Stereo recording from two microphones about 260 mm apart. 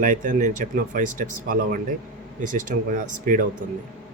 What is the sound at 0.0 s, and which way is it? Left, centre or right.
Speech, right.